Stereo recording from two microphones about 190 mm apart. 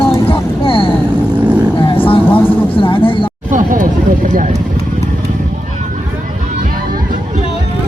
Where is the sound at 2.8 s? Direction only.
25° left (ahead or behind).